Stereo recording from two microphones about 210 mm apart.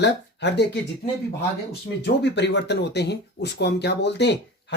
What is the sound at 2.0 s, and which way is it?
Speech, 55° left (ahead or behind).